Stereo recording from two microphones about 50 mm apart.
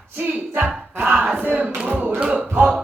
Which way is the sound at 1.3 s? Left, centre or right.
Right.